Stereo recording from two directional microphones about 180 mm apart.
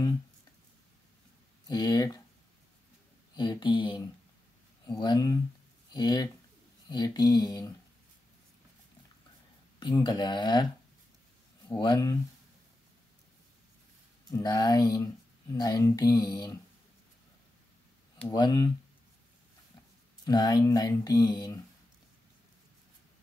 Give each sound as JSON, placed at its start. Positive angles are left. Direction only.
{"t": 1.7, "sound": "speech", "side_deg": 20}
{"t": 3.3, "sound": "speech", "side_deg": 25}
{"t": 9.8, "sound": "speech", "side_deg": 25}
{"t": 11.8, "sound": "speech", "side_deg": 20}
{"t": 14.3, "sound": "speech", "side_deg": 20}
{"t": 18.3, "sound": "speech", "side_deg": 25}
{"t": 20.2, "sound": "speech", "side_deg": 20}